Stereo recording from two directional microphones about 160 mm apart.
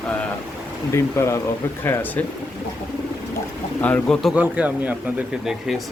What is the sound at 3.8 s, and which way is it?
Speech, 5° left (ahead or behind).